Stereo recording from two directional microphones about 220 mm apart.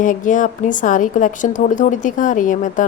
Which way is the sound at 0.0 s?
35° left (ahead or behind).